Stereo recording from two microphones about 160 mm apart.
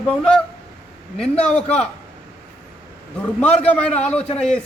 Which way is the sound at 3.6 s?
10° left (ahead or behind).